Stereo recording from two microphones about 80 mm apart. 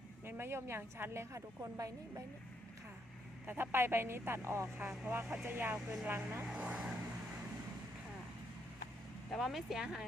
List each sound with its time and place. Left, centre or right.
0.3 s a woman's voice: right
3.4 s a woman's voice: right
6.5 s speech: centre
9.3 s speech: centre